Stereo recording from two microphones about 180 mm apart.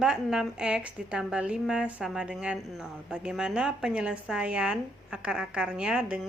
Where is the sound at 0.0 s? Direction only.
5° right (ahead or behind).